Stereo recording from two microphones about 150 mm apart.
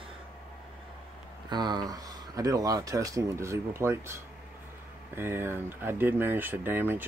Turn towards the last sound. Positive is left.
turn(degrees=-15)  # may be behind; listen again after turning